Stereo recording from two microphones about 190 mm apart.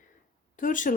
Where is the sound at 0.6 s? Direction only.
45° left (ahead or behind).